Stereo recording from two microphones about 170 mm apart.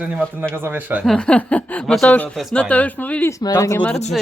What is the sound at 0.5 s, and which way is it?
Speech, 10° right (ahead or behind).